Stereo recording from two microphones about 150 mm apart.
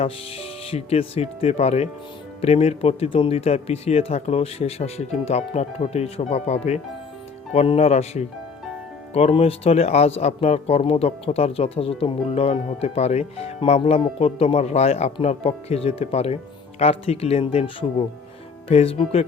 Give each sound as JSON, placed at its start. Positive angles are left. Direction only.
{"t": 0.0, "sound": "speech", "side_deg": 40}